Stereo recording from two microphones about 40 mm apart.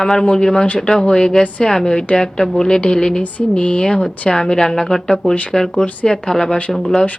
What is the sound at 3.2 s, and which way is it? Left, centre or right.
A woman's voice, left.